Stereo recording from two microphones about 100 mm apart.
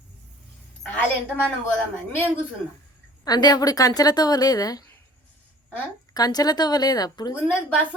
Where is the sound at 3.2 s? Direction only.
40° left (ahead or behind).